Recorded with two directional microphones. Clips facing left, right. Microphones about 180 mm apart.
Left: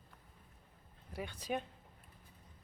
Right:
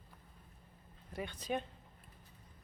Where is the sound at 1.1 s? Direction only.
10° left (ahead or behind).